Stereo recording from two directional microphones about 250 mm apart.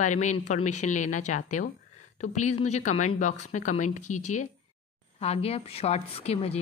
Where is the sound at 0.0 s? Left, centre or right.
Left.